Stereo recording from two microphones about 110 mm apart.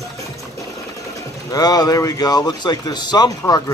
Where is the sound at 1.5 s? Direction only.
35° left (ahead or behind).